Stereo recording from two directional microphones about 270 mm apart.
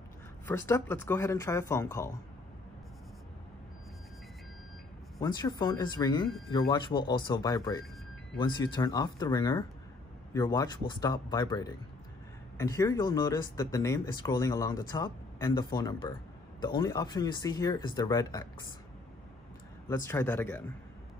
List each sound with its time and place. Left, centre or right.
0.5 s speech: centre
5.2 s speech: centre
19.9 s speech: centre